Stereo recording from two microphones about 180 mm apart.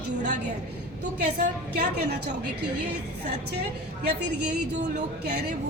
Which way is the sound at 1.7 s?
65° right (ahead or behind).